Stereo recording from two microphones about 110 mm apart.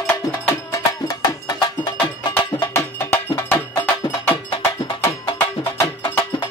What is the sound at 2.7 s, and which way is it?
Cowbell, 25° left (ahead or behind).